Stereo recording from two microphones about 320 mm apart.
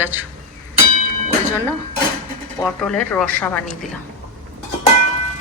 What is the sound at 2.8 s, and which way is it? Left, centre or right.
Speech, centre.